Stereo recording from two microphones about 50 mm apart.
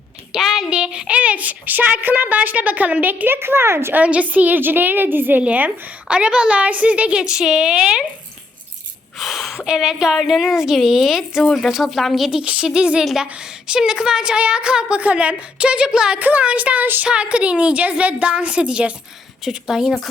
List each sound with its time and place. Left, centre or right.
0.3 s a sound: centre
0.7 s a child's voice: centre; by 3.9 s right
3.9 s a child's voice: right
5.4 s a woman's voice: right
9.1 s a sound: centre
9.6 s a woman's voice: centre
12.3 s a woman's voice: right
16.2 s a child's voice: right
19.5 s a woman's voice: centre